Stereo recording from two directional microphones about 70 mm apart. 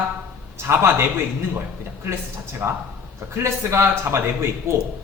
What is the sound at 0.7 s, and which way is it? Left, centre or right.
A man's voice, right.